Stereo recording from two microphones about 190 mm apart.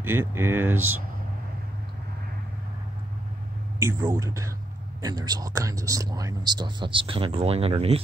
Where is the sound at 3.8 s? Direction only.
15° right (ahead or behind).